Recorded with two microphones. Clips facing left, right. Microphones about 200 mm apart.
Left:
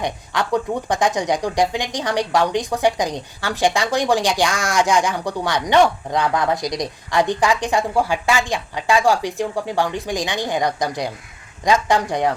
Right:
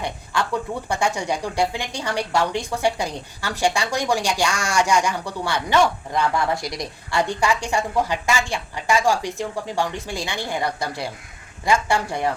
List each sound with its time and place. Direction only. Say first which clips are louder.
0.0 s speech: left 2 dB; 15° left (ahead or behind)
4.4 s speech: left 2 dB; 15° right (ahead or behind)
5.2 s speech: left 4 dB; 15° left (ahead or behind)